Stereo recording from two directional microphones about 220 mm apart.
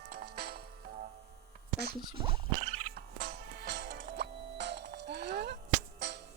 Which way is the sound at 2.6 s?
30° right (ahead or behind).